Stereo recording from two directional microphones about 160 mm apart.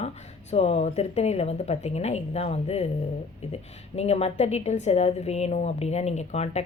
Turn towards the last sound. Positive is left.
turn(degrees=40)  # may be behind; listen again after turning